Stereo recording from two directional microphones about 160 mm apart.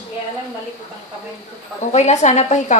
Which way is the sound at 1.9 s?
45° left (ahead or behind).